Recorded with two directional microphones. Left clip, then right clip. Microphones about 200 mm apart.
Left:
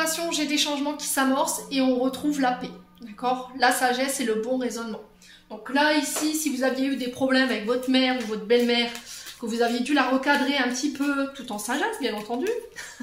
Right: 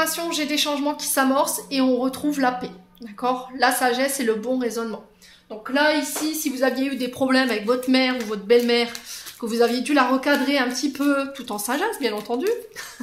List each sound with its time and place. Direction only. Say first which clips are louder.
0.0 s speech: right 2 dB; 50° right (ahead or behind)
6.3 s speech: right 5 dB; 55° right (ahead or behind)